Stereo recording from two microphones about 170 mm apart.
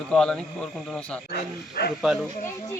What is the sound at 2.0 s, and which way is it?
Speech, centre (ahead or behind).